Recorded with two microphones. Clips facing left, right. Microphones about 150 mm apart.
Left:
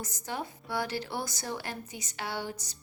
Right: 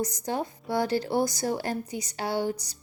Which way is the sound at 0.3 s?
40° right (ahead or behind).